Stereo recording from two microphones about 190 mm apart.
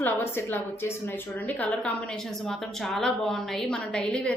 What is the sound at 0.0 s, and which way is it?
A woman's voice, 10° left (ahead or behind).